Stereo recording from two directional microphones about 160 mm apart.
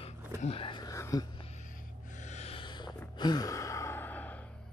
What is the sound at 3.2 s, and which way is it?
Sigh, 25° left (ahead or behind).